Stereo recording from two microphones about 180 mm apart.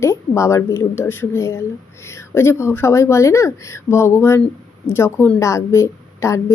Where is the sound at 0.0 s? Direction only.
15° left (ahead or behind).